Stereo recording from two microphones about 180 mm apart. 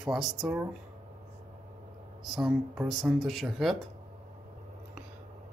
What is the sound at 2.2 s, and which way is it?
Speech, centre (ahead or behind).